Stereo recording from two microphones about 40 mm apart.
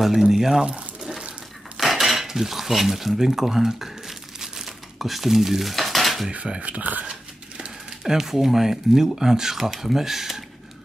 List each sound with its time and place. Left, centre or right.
0.0 s speech: centre
1.8 s cutlery: centre
4.4 s dishes: centre
6.3 s speech: right
8.0 s speech: centre